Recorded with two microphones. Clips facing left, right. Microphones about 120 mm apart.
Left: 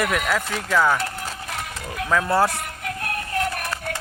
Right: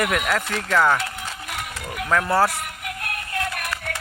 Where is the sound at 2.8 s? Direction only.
30° left (ahead or behind).